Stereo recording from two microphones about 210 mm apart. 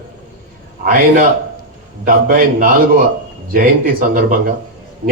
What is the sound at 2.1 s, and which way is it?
Speech, 40° right (ahead or behind).